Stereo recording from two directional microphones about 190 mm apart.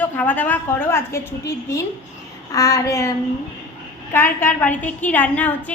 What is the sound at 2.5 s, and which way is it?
Speech, 15° left (ahead or behind).